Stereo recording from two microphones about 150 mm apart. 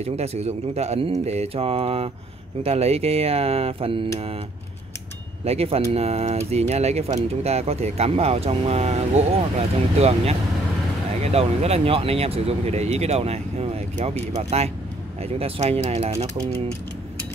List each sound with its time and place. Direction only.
0.0 s speech: 45° right (ahead or behind)
5.4 s speech: 45° right (ahead or behind)
11.3 s speech: 45° right (ahead or behind)